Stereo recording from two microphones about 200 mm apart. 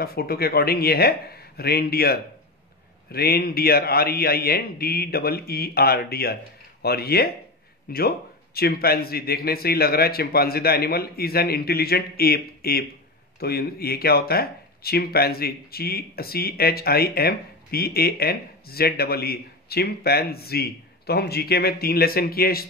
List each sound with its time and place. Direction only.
0.0 s speech: 50° left (ahead or behind)